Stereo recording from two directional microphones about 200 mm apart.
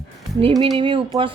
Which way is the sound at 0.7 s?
25° right (ahead or behind).